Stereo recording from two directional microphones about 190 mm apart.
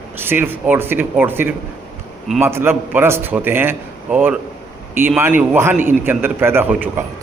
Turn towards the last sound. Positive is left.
turn(degrees=-10)  # may be behind; listen again after turning